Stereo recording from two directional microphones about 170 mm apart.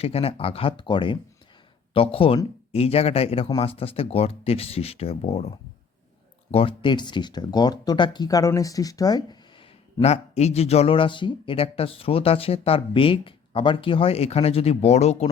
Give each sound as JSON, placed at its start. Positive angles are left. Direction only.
{"t": 0.0, "sound": "speech", "side_deg": 35}
{"t": 10.0, "sound": "speech", "side_deg": 40}